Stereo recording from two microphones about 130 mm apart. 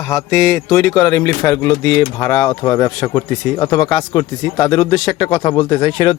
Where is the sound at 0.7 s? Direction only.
25° left (ahead or behind).